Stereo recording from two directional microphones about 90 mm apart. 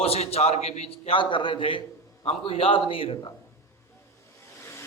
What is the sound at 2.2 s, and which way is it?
A man's voice, 90° left.